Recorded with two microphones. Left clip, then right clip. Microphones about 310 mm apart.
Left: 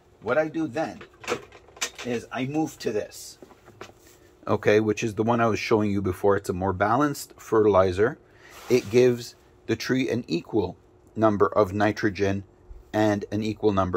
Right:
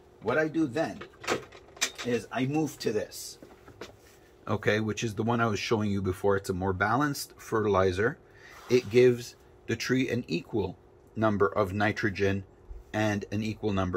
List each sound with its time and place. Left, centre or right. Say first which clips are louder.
0.2 s speech: left 3 dB; centre
2.3 s speech: left 2 dB; centre
4.5 s speech: left 7 dB; centre